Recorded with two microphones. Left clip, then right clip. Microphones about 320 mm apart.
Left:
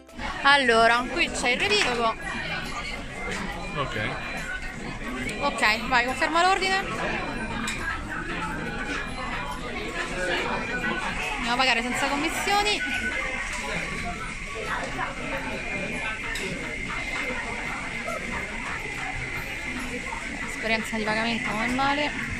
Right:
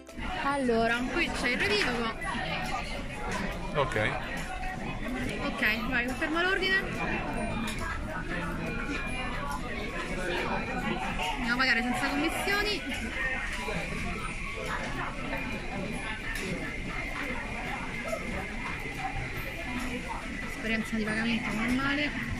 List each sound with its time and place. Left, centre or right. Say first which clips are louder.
0.5 s speech: left 10 dB; left
0.8 s speech: left 7 dB; centre
5.6 s speech: left 6 dB; centre
11.4 s speech: left 4 dB; centre